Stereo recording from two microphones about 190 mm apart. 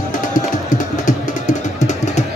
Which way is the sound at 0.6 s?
40° left (ahead or behind).